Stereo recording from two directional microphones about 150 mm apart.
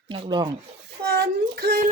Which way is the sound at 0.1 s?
30° right (ahead or behind).